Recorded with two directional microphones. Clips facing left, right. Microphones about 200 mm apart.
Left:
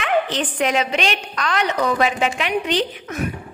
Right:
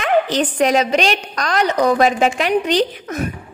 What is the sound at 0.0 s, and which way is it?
A woman's voice, 40° right (ahead or behind).